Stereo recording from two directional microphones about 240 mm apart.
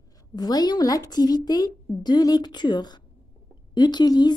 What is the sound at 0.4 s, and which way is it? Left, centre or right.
A woman's voice, centre.